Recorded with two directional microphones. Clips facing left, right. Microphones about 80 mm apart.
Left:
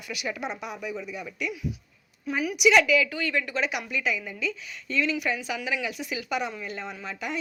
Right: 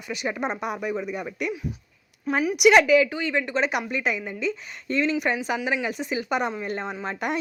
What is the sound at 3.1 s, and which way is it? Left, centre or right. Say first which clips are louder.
A woman's voice: right 3 dB; right.